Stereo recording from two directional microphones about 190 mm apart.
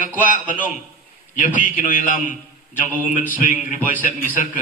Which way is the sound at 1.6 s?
45° left (ahead or behind).